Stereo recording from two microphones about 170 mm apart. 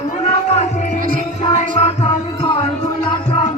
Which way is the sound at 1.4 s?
30° left (ahead or behind).